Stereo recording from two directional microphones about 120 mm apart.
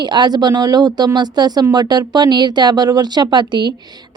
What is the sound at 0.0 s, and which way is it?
Speech, 40° right (ahead or behind).